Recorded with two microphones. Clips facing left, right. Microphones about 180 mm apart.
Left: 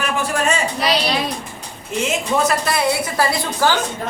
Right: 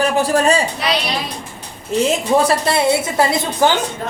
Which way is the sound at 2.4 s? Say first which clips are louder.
Right 3 dB; 25° right (ahead or behind).